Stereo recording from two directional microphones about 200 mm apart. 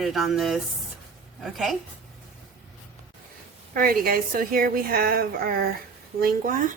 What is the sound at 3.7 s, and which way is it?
A woman's voice, 45° right (ahead or behind).